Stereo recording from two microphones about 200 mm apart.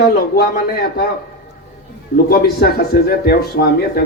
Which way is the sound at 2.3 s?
50° left (ahead or behind).